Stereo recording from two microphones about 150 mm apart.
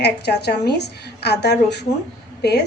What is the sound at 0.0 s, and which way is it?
A woman's voice, 90° left.